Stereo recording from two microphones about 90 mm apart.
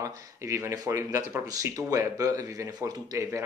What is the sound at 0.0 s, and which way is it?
Speech, 35° right (ahead or behind).